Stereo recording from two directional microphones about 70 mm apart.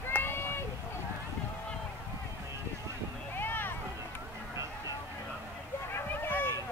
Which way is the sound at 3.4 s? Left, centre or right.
Left.